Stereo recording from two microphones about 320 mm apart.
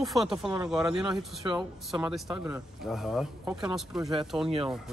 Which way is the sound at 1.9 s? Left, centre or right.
Centre.